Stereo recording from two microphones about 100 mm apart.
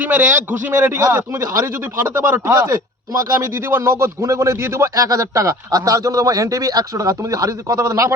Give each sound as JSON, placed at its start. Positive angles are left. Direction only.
{"t": 0.0, "sound": "a man's voice", "side_deg": -15}
{"t": 1.4, "sound": "a man's voice", "side_deg": -30}
{"t": 1.8, "sound": "speech", "side_deg": -20}
{"t": 3.3, "sound": "a man's voice", "side_deg": -25}